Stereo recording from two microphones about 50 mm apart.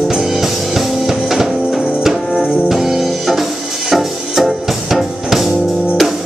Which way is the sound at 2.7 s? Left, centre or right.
Centre.